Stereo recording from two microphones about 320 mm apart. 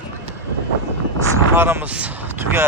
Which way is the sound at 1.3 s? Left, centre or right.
Centre.